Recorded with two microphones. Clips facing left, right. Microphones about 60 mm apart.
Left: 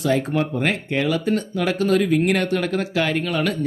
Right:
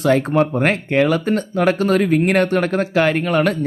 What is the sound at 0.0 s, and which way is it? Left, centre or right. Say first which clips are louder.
Speech: right 5 dB; right.